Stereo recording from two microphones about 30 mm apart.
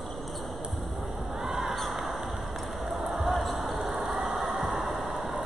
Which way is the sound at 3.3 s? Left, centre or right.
Centre.